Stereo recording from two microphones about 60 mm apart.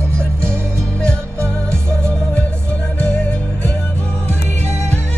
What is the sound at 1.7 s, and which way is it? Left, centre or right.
Music, centre.